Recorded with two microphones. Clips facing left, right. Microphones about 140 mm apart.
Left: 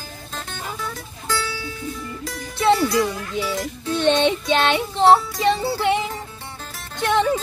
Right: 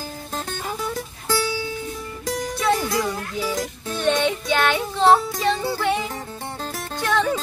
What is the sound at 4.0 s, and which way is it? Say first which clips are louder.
Music: left 3 dB; 25° left (ahead or behind).